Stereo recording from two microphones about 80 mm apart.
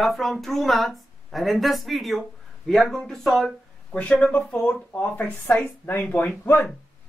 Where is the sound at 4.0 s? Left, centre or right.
Centre.